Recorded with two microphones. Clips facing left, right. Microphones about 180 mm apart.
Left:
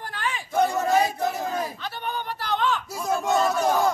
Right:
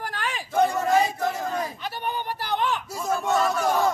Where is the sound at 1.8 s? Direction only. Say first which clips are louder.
Right 1 dB; 15° right (ahead or behind).